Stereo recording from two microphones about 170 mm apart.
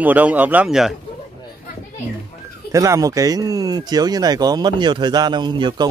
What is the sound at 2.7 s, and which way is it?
Speech, 20° right (ahead or behind).